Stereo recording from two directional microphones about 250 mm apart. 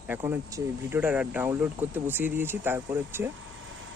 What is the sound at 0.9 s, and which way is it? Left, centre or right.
Speech, centre.